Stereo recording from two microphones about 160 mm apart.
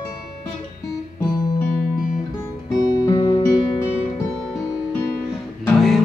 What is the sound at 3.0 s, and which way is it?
Music, 25° left (ahead or behind).